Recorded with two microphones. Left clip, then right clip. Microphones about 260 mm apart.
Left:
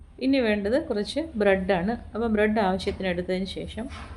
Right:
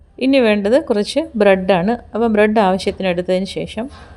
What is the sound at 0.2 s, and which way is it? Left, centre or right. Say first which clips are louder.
A woman's voice: right 10 dB; right.